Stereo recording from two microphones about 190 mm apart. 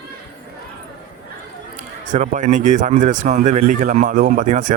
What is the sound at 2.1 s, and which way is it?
Speech, 40° right (ahead or behind).